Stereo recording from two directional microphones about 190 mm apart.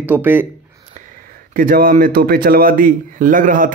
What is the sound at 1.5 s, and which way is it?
A man's voice, 45° right (ahead or behind).